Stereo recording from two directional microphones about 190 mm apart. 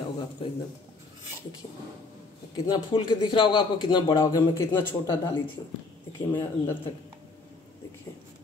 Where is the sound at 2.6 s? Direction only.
20° left (ahead or behind).